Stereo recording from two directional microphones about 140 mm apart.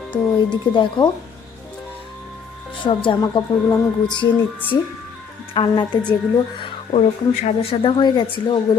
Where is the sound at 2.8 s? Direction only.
35° left (ahead or behind).